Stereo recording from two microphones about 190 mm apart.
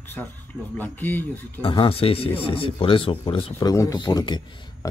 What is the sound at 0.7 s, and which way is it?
Speech, 10° left (ahead or behind).